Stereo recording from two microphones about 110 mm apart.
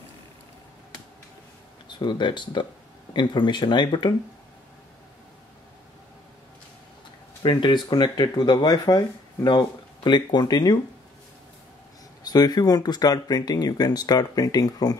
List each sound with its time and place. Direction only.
1.9 s speech: 45° left (ahead or behind)
7.4 s speech: 40° left (ahead or behind)
12.2 s speech: 35° left (ahead or behind)